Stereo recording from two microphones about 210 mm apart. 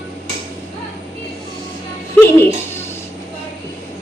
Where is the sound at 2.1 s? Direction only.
10° left (ahead or behind).